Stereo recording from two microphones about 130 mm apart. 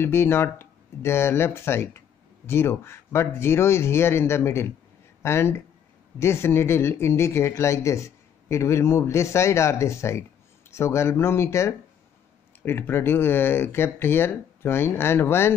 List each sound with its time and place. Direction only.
0.0 s speech: 20° left (ahead or behind)